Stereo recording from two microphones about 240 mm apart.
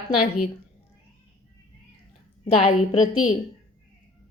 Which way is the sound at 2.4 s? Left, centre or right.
Left.